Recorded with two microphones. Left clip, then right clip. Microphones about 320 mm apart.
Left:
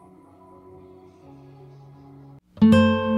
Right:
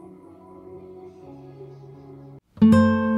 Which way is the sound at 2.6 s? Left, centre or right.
Centre.